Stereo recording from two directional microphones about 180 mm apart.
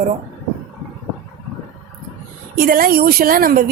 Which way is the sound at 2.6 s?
55° right (ahead or behind).